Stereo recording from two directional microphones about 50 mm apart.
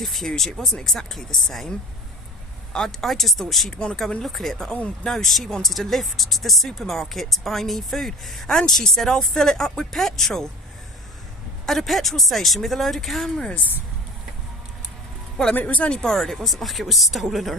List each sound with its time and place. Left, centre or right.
0.0 s speech: centre
2.7 s speech: centre
3.7 s speech: centre
11.6 s speech: centre
15.5 s speech: left
16.0 s speech: centre